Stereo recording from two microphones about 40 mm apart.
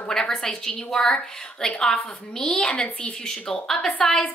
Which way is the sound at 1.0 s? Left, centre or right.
Left.